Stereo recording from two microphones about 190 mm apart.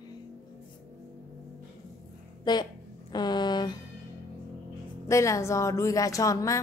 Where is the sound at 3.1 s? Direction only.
20° left (ahead or behind).